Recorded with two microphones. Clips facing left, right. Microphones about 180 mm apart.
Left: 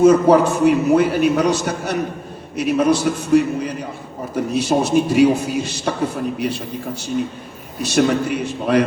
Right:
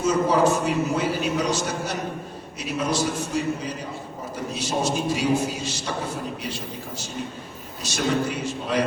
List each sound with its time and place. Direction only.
0.0 s a man's voice: 60° left (ahead or behind)
7.8 s a man's voice: 60° left (ahead or behind)